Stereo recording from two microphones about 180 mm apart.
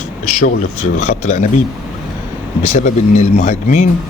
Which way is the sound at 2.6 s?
40° left (ahead or behind).